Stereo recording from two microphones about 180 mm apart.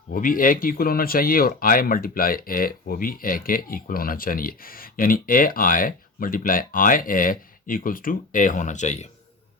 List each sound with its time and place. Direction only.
0.1 s speech: 50° left (ahead or behind)